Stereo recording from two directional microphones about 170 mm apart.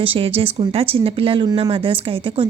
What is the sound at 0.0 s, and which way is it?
A woman's voice, 35° right (ahead or behind).